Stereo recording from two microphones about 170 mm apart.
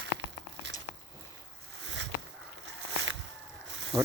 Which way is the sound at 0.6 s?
90° right.